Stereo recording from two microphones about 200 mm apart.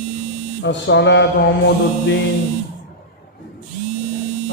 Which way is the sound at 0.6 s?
65° left (ahead or behind).